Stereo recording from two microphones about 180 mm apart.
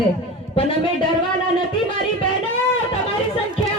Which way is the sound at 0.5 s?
25° left (ahead or behind).